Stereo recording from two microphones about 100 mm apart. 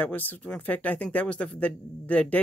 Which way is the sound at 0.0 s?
15° left (ahead or behind).